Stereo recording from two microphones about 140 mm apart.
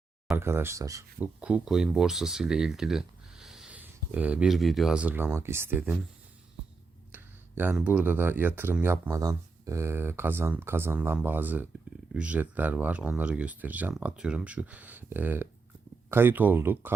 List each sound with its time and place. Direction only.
0.3 s speech: 20° right (ahead or behind)
1.2 s speech: 10° right (ahead or behind)
7.1 s speech: 15° right (ahead or behind)